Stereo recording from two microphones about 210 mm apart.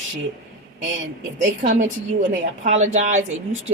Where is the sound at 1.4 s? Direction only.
35° right (ahead or behind).